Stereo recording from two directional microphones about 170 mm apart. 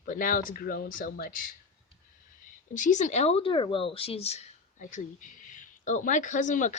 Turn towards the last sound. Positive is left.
turn(degrees=50)  # may be behind; listen again after turning